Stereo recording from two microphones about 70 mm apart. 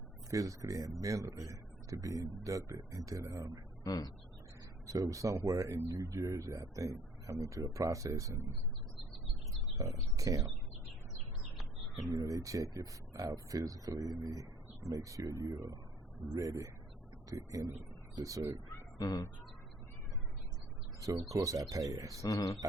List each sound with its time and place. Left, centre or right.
0.3 s speech: right
3.8 s speech: left
5.1 s speech: right
9.7 s speech: right
12.1 s speech: right
18.9 s speech: left
21.2 s speech: right
22.2 s speech: left